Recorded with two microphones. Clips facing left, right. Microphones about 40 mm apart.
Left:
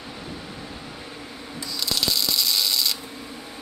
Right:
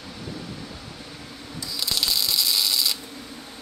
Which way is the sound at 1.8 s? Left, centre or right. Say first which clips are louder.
Left 1 dB; centre.